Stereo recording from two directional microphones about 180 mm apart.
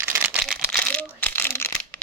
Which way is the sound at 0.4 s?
Centre (ahead or behind).